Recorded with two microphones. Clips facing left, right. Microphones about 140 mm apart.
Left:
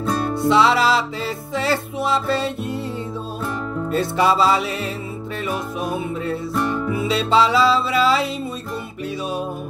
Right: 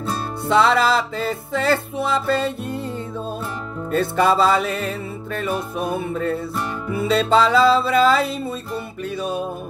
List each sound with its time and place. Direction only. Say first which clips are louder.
0.5 s music: even; 50° right (ahead or behind)
3.9 s music: right 1 dB; 50° right (ahead or behind)